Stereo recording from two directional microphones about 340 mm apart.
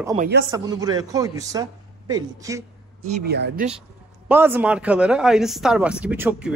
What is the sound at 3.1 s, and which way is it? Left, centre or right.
Speech, right.